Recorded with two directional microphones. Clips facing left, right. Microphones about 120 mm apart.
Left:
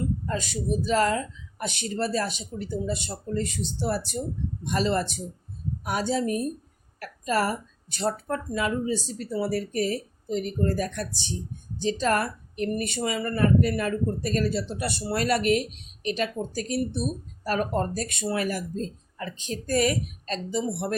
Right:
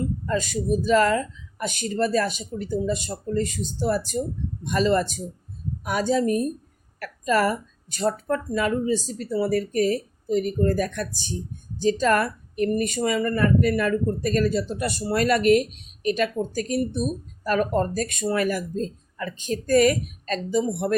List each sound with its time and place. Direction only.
0.3 s speech: 50° right (ahead or behind)